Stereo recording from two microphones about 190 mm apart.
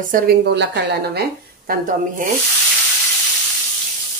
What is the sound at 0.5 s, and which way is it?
Speech, 60° right (ahead or behind).